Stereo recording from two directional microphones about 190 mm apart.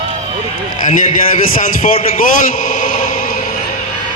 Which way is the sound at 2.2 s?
45° left (ahead or behind).